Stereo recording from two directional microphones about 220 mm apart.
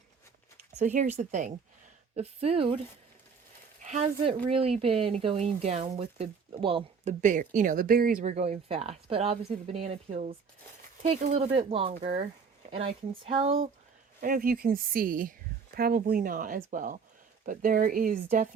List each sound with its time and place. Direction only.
0.8 s speech: 35° right (ahead or behind)
3.8 s speech: 30° right (ahead or behind)
14.2 s speech: 40° right (ahead or behind)